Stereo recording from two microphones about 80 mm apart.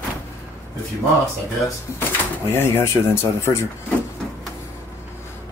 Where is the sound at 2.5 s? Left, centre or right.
Left.